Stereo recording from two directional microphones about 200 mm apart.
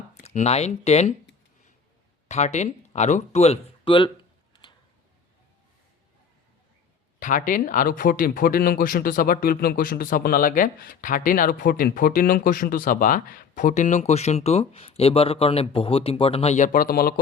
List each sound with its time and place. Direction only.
0.1 s speech: 35° left (ahead or behind)
2.2 s speech: 35° left (ahead or behind)
7.2 s speech: 40° left (ahead or behind)